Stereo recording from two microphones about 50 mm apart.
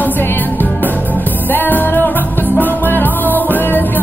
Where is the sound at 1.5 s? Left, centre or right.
Left.